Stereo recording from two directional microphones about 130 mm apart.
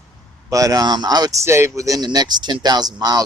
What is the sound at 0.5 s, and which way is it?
Speech, 25° right (ahead or behind).